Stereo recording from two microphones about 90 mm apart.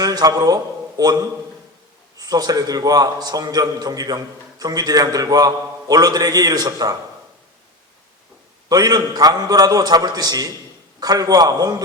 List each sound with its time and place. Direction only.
0.0 s a sound: 45° right (ahead or behind)
2.1 s a man's voice: 45° right (ahead or behind)
8.7 s a man's voice: 45° right (ahead or behind)